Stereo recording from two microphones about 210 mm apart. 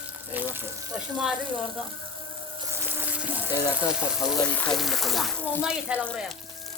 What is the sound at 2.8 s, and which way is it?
Water, 10° right (ahead or behind).